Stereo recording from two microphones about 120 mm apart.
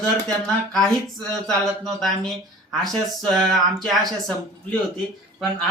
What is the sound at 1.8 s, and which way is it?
Speech, centre (ahead or behind).